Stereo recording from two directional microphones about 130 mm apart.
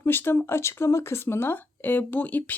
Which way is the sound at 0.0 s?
15° left (ahead or behind).